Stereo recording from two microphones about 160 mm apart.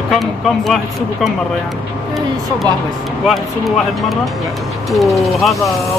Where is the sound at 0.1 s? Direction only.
Centre (ahead or behind).